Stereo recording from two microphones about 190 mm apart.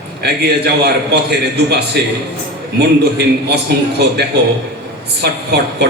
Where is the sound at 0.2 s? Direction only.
60° right (ahead or behind).